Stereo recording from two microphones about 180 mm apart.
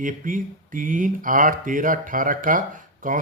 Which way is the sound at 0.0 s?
50° right (ahead or behind).